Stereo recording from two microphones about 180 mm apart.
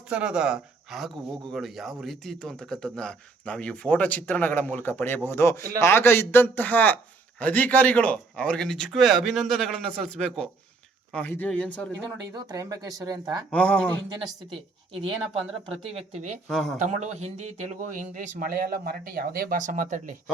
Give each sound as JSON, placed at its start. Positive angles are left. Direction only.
{"t": 0.1, "sound": "a man's voice", "side_deg": -5}
{"t": 12.3, "sound": "speech", "side_deg": -20}
{"t": 13.5, "sound": "a man's voice", "side_deg": 5}
{"t": 15.8, "sound": "speech", "side_deg": -35}
{"t": 16.5, "sound": "speech", "side_deg": 5}
{"t": 16.7, "sound": "speech", "side_deg": -40}